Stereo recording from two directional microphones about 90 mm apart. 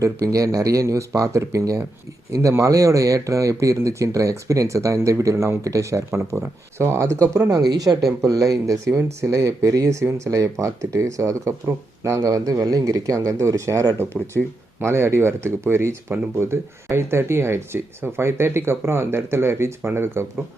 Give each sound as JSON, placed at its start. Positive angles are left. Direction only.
{"t": 0.0, "sound": "speech", "side_deg": -35}
{"t": 14.3, "sound": "speech", "side_deg": 5}
{"t": 14.8, "sound": "speech", "side_deg": -30}